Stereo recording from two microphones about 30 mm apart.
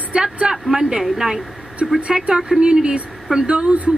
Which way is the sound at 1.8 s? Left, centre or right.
Right.